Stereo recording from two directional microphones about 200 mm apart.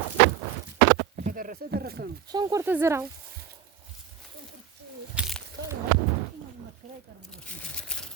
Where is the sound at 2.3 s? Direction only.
20° right (ahead or behind).